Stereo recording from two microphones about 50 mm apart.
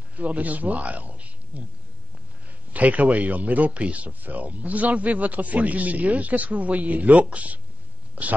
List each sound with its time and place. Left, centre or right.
0.1 s a man's voice: right
2.7 s a man's voice: right